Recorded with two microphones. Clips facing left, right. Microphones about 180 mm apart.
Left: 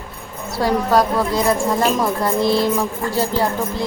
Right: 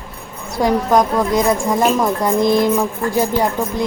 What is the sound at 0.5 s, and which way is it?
A woman's voice, 15° right (ahead or behind).